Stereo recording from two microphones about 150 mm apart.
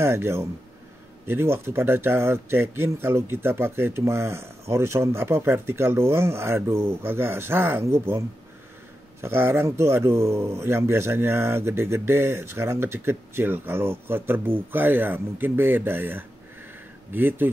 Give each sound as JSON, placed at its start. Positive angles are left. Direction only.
{"t": 0.0, "sound": "speech", "side_deg": -15}
{"t": 9.2, "sound": "speech", "side_deg": -15}